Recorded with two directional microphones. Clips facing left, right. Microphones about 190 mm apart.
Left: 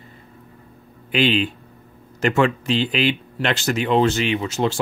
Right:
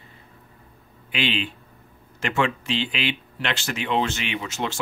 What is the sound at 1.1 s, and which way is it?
Speech, 40° left (ahead or behind).